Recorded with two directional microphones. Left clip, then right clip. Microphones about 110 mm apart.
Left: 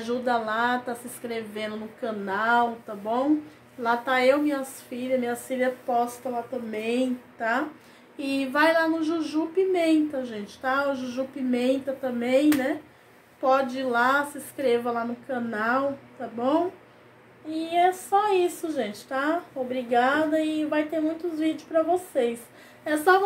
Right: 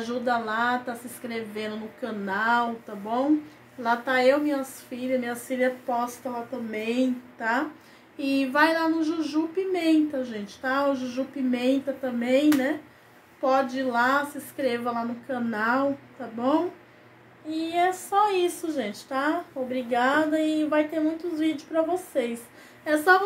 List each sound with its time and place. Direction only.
0.0 s a woman's voice: 15° left (ahead or behind)